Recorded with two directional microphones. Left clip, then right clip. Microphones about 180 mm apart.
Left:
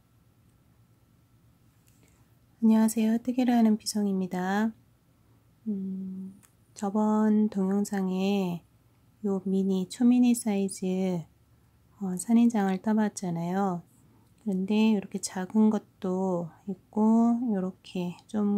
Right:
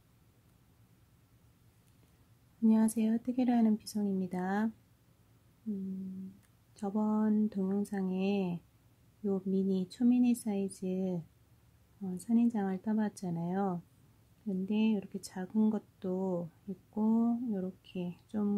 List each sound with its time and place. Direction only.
2.6 s speech: 5° left (ahead or behind)
6.7 s speech: 10° left (ahead or behind)